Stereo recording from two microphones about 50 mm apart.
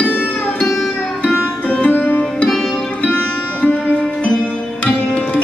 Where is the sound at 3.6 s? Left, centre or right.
Left.